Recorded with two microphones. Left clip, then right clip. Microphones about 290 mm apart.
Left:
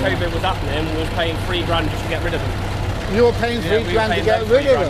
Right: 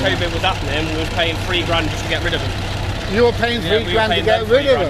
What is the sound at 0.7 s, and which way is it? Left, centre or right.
Speech, centre.